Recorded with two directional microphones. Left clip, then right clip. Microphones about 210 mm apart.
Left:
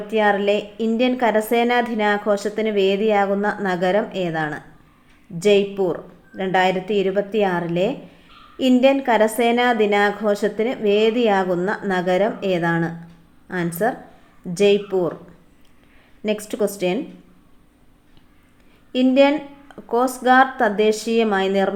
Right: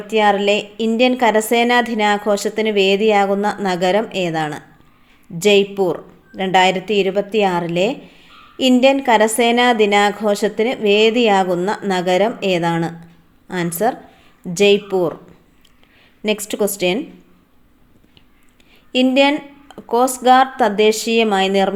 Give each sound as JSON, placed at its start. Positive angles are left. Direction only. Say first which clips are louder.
{"t": 0.1, "sound": "a woman's voice", "louder": "right 4 dB", "side_deg": -35}
{"t": 16.2, "sound": "a woman's voice", "louder": "right 3 dB", "side_deg": -35}
{"t": 18.9, "sound": "a woman's voice", "louder": "right 2 dB", "side_deg": -35}